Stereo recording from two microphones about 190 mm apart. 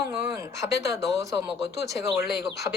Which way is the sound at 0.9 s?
15° right (ahead or behind).